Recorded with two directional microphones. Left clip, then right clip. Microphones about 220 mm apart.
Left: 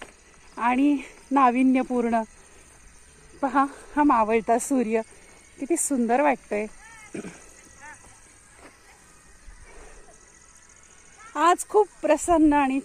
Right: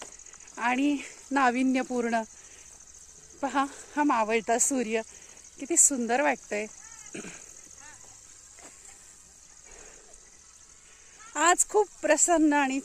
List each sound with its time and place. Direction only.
0.6 s speech: 10° left (ahead or behind)
3.3 s speech: 20° left (ahead or behind)
11.3 s speech: 10° left (ahead or behind)